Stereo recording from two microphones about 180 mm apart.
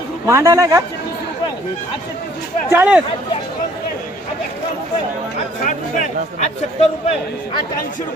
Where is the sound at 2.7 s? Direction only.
10° right (ahead or behind).